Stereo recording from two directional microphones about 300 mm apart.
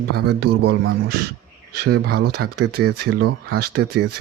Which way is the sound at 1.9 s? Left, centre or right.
Right.